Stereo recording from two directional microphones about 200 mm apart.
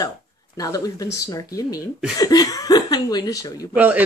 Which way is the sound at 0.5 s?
15° left (ahead or behind).